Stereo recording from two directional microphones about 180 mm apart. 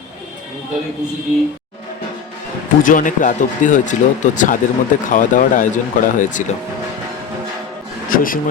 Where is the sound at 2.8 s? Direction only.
45° left (ahead or behind).